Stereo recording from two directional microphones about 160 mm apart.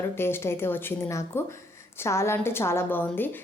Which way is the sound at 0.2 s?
15° left (ahead or behind).